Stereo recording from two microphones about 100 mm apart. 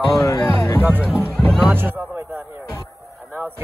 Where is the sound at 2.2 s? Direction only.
25° right (ahead or behind).